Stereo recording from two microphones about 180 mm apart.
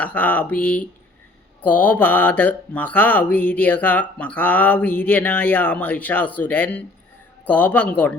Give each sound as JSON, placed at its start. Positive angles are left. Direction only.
{"t": 0.0, "sound": "speech", "side_deg": 10}